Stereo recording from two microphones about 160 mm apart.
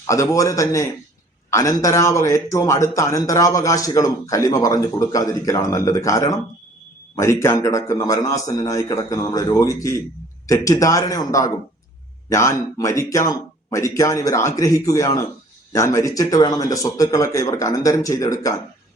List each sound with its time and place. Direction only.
0.1 s a man's voice: 20° left (ahead or behind)